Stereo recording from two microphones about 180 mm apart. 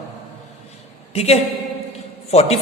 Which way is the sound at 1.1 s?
35° left (ahead or behind).